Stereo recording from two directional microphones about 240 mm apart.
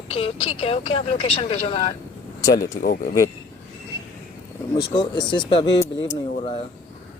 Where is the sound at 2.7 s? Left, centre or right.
Left.